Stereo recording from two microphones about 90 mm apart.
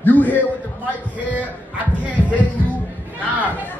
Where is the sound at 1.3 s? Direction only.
15° right (ahead or behind).